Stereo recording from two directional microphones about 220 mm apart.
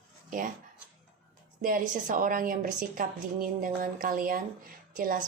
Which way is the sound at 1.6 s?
35° right (ahead or behind).